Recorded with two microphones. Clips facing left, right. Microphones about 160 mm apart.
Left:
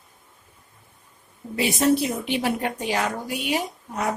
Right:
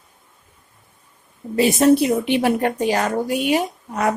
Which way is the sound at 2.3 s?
50° right (ahead or behind).